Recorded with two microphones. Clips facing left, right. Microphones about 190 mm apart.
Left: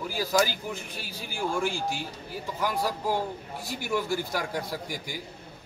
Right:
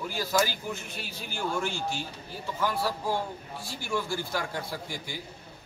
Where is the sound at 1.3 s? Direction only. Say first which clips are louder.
Left 2 dB; 15° left (ahead or behind).